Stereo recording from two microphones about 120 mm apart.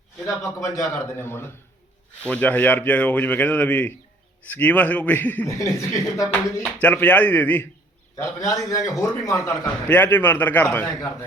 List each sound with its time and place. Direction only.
0.6 s a man's voice: 25° left (ahead or behind)
5.5 s a man's voice: 25° left (ahead or behind)
6.8 s a man's voice: 10° left (ahead or behind)
8.1 s a man's voice: 25° left (ahead or behind)